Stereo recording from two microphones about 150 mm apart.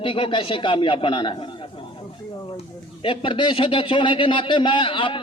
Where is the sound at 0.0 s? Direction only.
35° left (ahead or behind).